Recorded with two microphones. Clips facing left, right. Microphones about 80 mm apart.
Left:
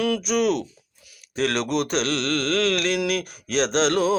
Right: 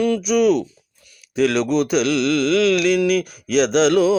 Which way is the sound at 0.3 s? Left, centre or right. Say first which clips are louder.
Right 7 dB; left.